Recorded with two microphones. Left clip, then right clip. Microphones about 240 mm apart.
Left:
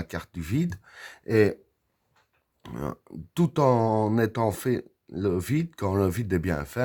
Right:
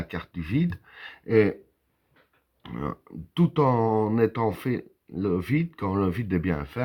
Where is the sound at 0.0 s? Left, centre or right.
Left.